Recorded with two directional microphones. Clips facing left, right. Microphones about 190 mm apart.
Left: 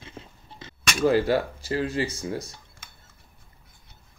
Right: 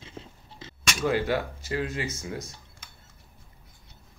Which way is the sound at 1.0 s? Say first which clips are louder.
Left 5 dB; 35° left (ahead or behind).